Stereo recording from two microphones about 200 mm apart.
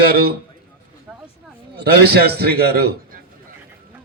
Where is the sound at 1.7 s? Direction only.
55° right (ahead or behind).